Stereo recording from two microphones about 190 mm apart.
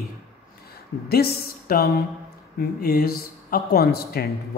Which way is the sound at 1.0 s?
55° left (ahead or behind).